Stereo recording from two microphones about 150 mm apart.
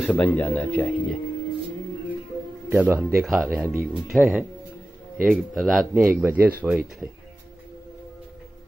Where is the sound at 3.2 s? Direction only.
Centre (ahead or behind).